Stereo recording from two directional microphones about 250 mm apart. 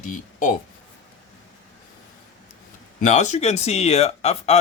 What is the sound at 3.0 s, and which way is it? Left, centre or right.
Speech, left.